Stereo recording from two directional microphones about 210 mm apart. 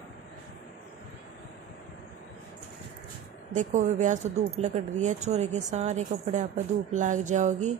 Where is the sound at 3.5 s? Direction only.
35° right (ahead or behind).